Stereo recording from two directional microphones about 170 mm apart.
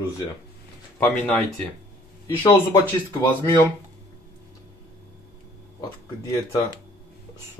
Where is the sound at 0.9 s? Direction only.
10° left (ahead or behind).